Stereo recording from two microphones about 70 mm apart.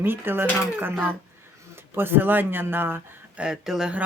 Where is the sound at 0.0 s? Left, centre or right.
Right.